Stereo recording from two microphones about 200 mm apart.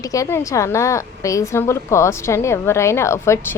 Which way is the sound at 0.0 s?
15° left (ahead or behind).